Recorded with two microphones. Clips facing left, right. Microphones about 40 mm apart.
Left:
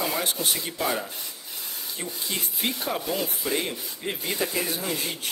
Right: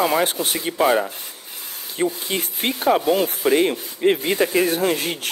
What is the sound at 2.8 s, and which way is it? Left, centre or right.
Speech, right.